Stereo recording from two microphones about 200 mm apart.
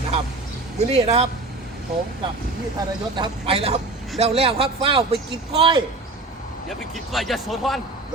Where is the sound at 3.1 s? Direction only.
25° right (ahead or behind).